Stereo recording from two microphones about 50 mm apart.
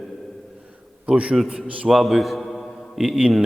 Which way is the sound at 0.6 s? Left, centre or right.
Right.